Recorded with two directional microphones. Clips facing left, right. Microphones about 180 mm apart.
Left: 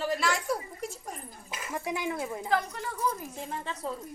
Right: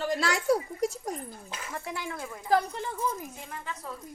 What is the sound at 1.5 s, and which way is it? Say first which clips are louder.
Speech: left 5 dB; 10° left (ahead or behind).